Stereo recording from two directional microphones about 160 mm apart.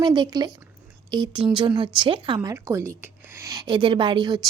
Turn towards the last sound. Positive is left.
turn(degrees=-25)  # may be behind; listen again after turning